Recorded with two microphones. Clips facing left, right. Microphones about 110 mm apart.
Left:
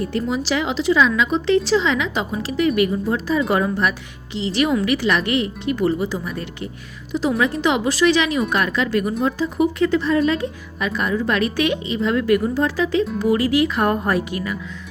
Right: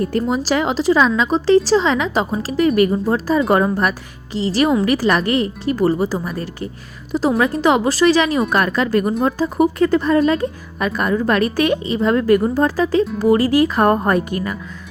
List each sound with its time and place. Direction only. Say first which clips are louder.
0.0 s a woman's voice: right 4 dB; 45° right (ahead or behind)